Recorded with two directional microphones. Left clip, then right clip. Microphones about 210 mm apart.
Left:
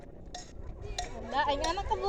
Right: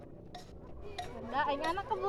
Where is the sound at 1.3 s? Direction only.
25° left (ahead or behind).